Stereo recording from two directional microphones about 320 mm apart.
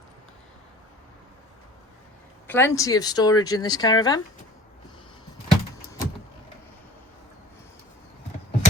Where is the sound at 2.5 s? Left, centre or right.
Centre.